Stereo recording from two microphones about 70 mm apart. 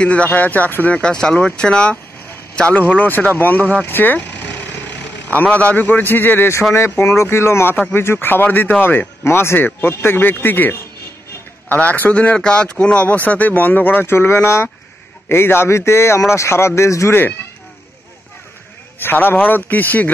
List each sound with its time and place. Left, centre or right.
0.0 s a man's voice: centre
2.8 s speech: left
18.9 s speech: left